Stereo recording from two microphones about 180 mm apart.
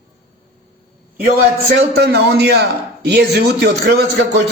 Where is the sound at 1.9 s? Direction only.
65° right (ahead or behind).